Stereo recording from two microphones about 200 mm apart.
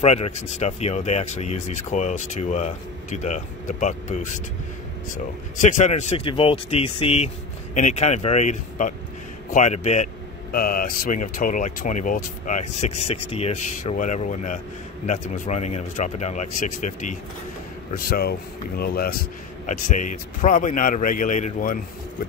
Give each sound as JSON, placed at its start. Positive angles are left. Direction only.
{"t": 0.0, "sound": "speech", "side_deg": 35}
{"t": 10.5, "sound": "speech", "side_deg": 45}